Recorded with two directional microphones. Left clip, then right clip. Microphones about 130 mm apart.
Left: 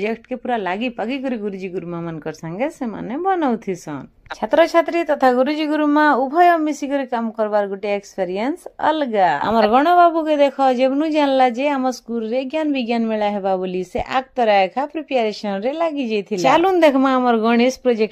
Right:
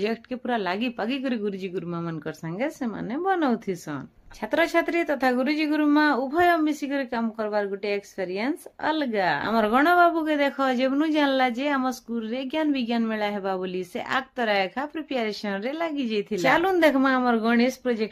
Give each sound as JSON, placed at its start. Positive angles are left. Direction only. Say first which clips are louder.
{"t": 0.0, "sound": "a woman's voice", "louder": "left 5 dB", "side_deg": 10}
{"t": 4.4, "sound": "a woman's voice", "louder": "left 8 dB", "side_deg": 35}